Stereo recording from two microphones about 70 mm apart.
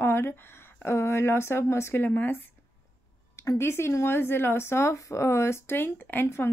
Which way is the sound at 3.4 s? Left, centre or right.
Left.